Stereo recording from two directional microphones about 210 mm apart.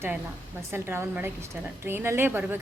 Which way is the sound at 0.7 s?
10° right (ahead or behind).